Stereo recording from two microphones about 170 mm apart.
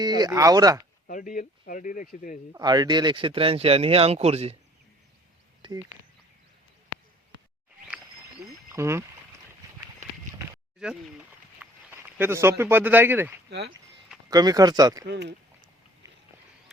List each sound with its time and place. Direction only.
0.0 s speech: 25° right (ahead or behind)
1.0 s speech: 50° left (ahead or behind)
2.5 s speech: 25° right (ahead or behind); by 4.5 s 40° right (ahead or behind)
5.6 s a sound: 30° right (ahead or behind)
8.7 s speech: 15° right (ahead or behind)
10.0 s a sound: 45° right (ahead or behind)
10.8 s speech: 5° right (ahead or behind)
13.5 s speech: 85° right
14.3 s speech: 20° right (ahead or behind)
15.0 s speech: 85° right